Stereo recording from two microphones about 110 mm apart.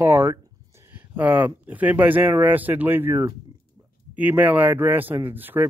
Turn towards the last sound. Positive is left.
turn(degrees=-20)  # may be behind; listen again after turning